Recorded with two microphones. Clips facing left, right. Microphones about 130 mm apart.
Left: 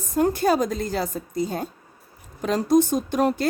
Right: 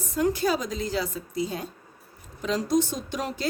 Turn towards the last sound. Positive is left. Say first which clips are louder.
# left 10 dB
turn(degrees=55)  # may be behind; listen again after turning